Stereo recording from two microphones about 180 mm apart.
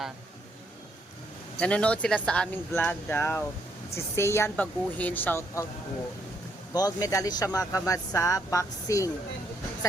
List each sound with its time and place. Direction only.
1.5 s speech: 5° left (ahead or behind)
6.7 s speech: 20° left (ahead or behind)